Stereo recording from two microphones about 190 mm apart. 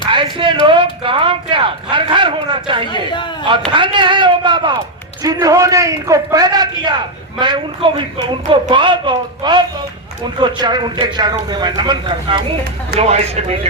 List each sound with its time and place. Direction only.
0.1 s a sound: 25° right (ahead or behind)
2.8 s a man's voice: 25° left (ahead or behind)
3.7 s speech: 25° right (ahead or behind)